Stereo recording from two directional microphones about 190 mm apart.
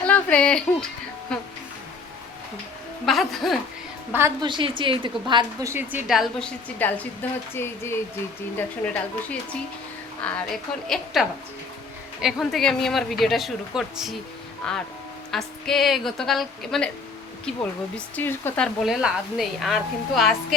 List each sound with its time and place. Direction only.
0.0 s a sound: 5° left (ahead or behind)
1.3 s a woman's voice: 5° left (ahead or behind)
3.1 s a woman's voice: centre (ahead or behind)
4.4 s a woman's voice: 25° right (ahead or behind); by 16.9 s centre (ahead or behind)
17.9 s a woman's voice: 10° left (ahead or behind)